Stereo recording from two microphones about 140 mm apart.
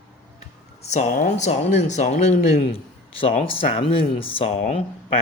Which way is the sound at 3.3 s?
45° left (ahead or behind).